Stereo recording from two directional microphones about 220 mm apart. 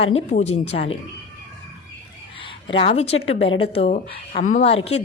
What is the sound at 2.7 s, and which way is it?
Speech, 25° left (ahead or behind).